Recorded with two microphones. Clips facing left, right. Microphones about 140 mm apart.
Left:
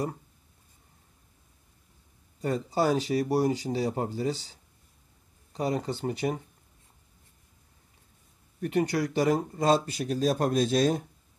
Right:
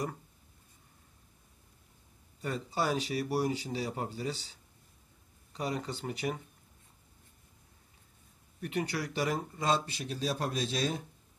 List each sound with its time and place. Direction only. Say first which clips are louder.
2.4 s speech: left 7 dB; 40° left (ahead or behind)
8.5 s speech: left 8 dB; 35° left (ahead or behind)